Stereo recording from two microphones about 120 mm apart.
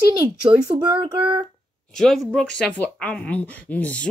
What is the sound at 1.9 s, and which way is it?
Speech, 5° left (ahead or behind).